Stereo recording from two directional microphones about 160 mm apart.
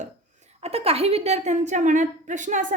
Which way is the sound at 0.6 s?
40° right (ahead or behind).